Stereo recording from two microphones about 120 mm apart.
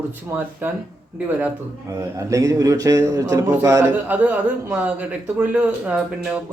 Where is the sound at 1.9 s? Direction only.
25° right (ahead or behind).